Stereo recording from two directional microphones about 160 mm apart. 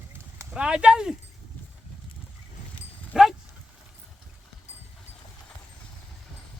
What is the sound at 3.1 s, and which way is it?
Dog, 5° right (ahead or behind).